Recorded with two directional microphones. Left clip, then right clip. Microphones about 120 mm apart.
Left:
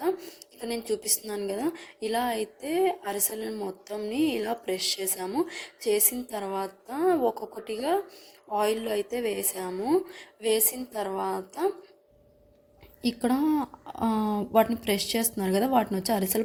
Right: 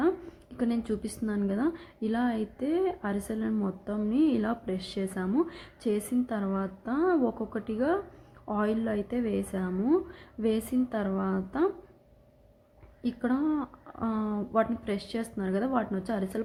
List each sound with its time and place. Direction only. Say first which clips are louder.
1.3 s a woman's voice: right 1 dB; 30° left (ahead or behind)
13.0 s a woman's voice: left 3 dB; 30° left (ahead or behind)